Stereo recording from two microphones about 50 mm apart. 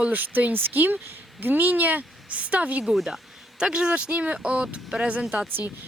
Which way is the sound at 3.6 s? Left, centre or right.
Centre.